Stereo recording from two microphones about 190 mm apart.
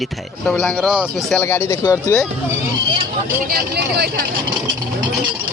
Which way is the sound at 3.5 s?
60° right (ahead or behind).